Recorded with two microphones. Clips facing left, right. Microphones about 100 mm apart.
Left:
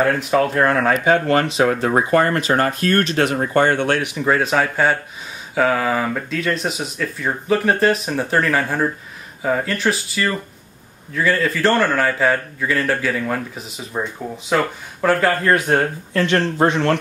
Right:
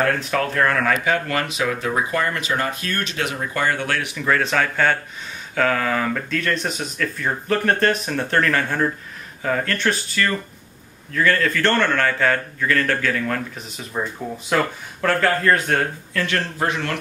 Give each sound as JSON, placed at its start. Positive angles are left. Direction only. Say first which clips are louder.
{"t": 0.0, "sound": "a man's voice", "louder": "left 4 dB", "side_deg": 15}